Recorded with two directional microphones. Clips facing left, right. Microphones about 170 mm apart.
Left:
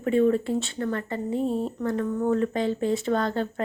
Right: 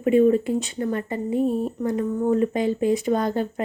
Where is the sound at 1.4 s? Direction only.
25° left (ahead or behind).